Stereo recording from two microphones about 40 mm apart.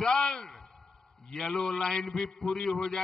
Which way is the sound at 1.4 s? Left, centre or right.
Centre.